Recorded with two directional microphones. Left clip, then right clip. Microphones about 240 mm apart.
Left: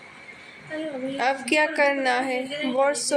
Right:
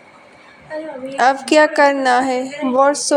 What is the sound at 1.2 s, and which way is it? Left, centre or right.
A woman's voice, right.